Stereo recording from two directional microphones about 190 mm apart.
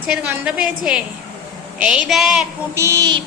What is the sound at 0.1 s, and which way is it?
A woman's voice, 5° right (ahead or behind).